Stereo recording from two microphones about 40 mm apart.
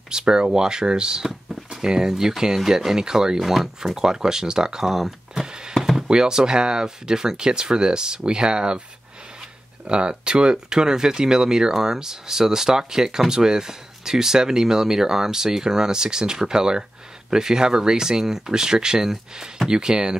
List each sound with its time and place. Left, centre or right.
0.1 s speech: centre